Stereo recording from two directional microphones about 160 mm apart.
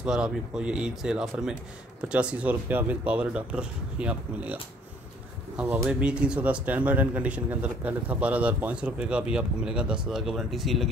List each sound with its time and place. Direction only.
0.0 s speech: 5° right (ahead or behind)
5.6 s speech: 10° right (ahead or behind)